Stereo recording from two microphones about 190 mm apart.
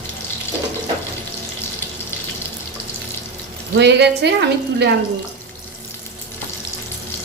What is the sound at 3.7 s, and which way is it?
A woman's voice, 65° right (ahead or behind).